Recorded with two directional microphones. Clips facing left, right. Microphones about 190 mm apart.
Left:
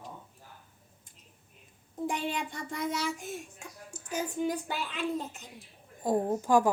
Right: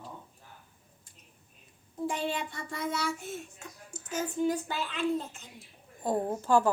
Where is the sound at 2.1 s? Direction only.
15° left (ahead or behind).